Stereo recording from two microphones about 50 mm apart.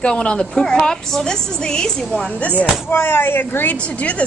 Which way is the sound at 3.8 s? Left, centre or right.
Left.